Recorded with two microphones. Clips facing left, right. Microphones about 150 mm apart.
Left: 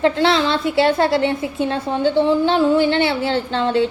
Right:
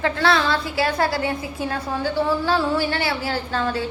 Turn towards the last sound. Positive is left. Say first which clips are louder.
# left 6 dB
turn(degrees=25)  # may be behind; listen again after turning